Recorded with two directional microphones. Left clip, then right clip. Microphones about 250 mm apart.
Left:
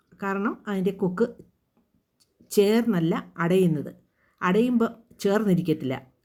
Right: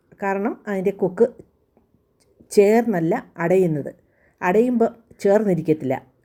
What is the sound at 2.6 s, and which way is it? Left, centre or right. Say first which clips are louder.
A woman's voice: right 6 dB; centre.